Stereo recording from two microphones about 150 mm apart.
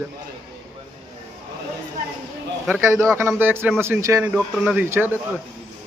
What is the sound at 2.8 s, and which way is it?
A man's voice, 20° right (ahead or behind).